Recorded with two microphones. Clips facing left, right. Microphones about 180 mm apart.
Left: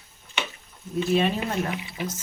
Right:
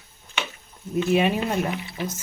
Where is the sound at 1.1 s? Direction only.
10° right (ahead or behind).